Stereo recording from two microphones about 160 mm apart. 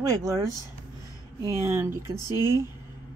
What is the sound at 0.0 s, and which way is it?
Speech, 20° right (ahead or behind).